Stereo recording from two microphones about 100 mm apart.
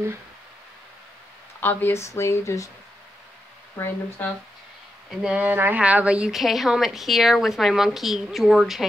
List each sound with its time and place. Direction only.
1.6 s speech: 20° left (ahead or behind)
3.7 s speech: 25° left (ahead or behind)
5.1 s a woman's voice: 10° right (ahead or behind)